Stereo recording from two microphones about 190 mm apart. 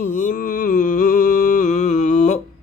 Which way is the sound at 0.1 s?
40° left (ahead or behind).